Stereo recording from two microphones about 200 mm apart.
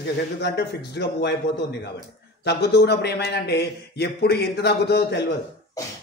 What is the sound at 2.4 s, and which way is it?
Speech, 55° left (ahead or behind).